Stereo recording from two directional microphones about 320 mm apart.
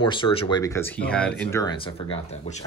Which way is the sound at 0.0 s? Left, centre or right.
Centre.